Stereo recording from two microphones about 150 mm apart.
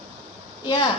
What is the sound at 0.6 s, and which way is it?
Speech, 30° left (ahead or behind).